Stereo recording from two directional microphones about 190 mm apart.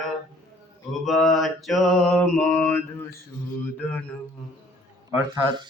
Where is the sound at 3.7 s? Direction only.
10° left (ahead or behind).